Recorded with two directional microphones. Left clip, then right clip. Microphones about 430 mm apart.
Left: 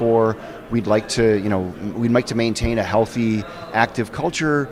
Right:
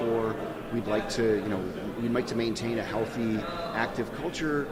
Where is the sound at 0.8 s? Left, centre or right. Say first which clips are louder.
Left 10 dB; left.